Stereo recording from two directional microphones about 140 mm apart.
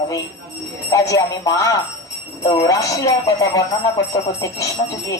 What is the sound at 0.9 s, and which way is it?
Speech, 25° left (ahead or behind).